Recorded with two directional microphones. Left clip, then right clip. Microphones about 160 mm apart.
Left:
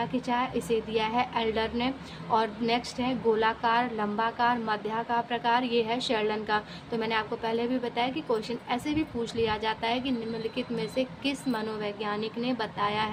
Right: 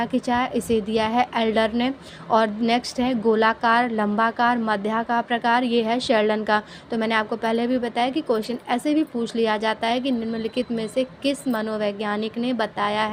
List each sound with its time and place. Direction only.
0.0 s a woman's voice: 45° right (ahead or behind)